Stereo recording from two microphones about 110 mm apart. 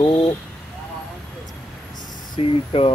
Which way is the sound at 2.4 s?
55° left (ahead or behind).